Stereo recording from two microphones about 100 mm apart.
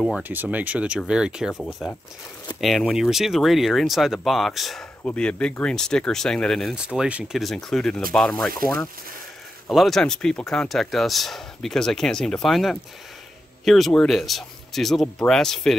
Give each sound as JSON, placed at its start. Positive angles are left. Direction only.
{"t": 0.2, "sound": "speech", "side_deg": -15}
{"t": 2.6, "sound": "speech", "side_deg": 0}
{"t": 6.7, "sound": "speech", "side_deg": -10}
{"t": 7.3, "sound": "speech", "side_deg": 5}
{"t": 9.7, "sound": "speech", "side_deg": 0}